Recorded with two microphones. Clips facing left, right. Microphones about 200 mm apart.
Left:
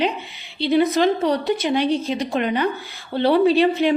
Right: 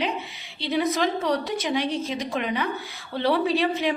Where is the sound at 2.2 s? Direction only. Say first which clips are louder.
Left 6 dB; 65° left (ahead or behind).